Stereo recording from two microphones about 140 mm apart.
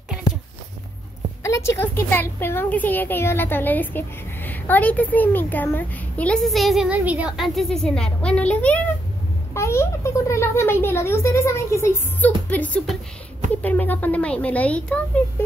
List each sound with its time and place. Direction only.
1.4 s a woman's voice: 20° left (ahead or behind)